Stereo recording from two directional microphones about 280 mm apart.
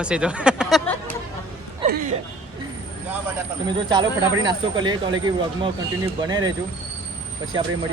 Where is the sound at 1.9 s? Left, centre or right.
Right.